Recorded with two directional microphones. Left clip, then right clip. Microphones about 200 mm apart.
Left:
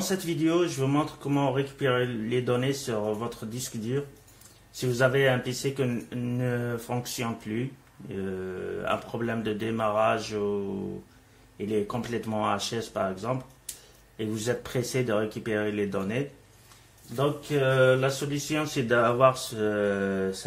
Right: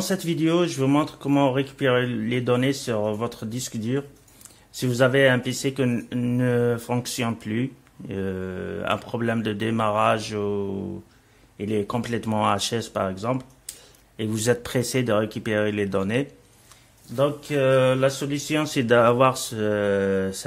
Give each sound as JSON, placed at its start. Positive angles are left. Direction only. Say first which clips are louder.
{"t": 0.0, "sound": "speech", "louder": "right 3 dB", "side_deg": -55}